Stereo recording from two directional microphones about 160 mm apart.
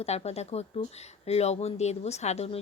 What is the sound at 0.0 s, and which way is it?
Speech, 40° left (ahead or behind).